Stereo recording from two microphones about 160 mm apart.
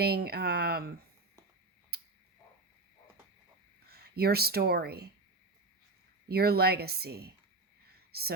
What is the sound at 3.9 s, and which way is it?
Speech, 80° right.